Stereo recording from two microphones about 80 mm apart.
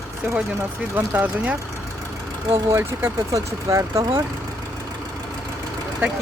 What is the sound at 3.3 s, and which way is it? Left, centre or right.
Speech, right.